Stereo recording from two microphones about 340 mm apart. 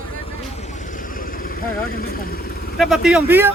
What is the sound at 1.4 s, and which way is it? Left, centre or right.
Speech, left.